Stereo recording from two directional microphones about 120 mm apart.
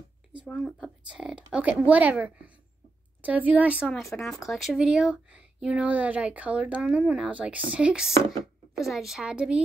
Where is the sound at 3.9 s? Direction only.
Centre (ahead or behind).